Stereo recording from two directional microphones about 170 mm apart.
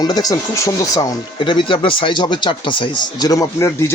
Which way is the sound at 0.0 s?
20° left (ahead or behind).